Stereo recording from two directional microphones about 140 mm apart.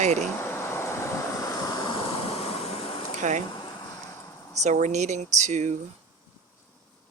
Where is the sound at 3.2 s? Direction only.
60° right (ahead or behind).